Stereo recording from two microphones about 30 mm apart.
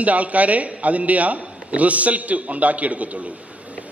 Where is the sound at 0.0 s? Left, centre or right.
Right.